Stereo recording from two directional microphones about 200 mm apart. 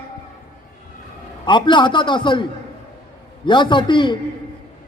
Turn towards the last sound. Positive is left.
turn(degrees=25)  # may be behind; listen again after turning